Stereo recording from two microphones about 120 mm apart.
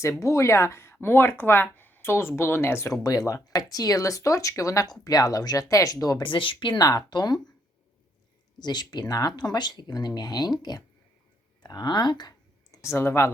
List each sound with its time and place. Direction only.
0.0 s speech: 25° left (ahead or behind)
6.2 s speech: 45° left (ahead or behind)
8.5 s speech: 35° left (ahead or behind)
12.7 s speech: 25° left (ahead or behind)